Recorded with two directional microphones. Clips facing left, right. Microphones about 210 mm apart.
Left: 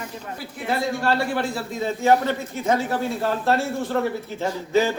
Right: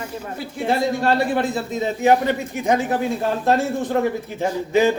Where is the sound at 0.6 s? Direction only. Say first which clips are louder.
Right 4 dB; 25° right (ahead or behind).